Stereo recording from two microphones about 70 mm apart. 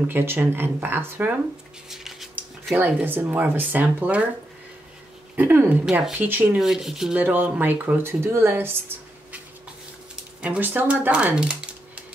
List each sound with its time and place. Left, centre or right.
0.1 s speech: right
1.9 s a sound: centre
2.7 s speech: right
5.3 s speech: right
6.6 s speech: centre
7.2 s speech: right
10.6 s speech: right